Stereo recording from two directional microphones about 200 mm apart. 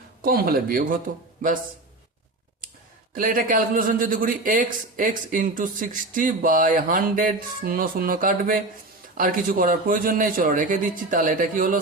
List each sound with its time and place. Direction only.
0.2 s speech: 45° right (ahead or behind)
3.2 s speech: 45° right (ahead or behind)